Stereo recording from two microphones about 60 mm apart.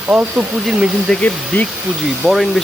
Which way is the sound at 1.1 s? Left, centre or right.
Left.